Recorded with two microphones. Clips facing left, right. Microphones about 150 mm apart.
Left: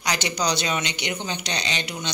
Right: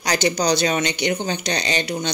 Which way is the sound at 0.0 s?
40° right (ahead or behind).